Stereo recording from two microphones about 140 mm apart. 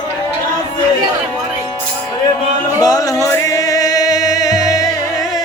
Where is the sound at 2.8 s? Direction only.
25° left (ahead or behind).